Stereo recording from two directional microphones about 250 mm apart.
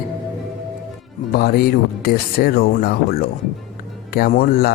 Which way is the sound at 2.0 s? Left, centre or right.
Left.